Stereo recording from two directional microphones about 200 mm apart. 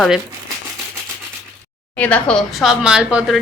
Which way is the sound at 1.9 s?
5° left (ahead or behind).